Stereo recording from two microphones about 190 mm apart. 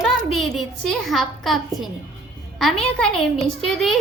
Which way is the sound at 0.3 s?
Centre (ahead or behind).